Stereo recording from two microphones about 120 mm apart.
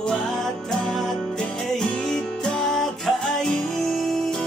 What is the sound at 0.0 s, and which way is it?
Music, 5° left (ahead or behind).